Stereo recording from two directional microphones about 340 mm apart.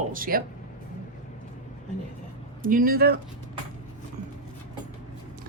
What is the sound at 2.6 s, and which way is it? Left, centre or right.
Speech, right.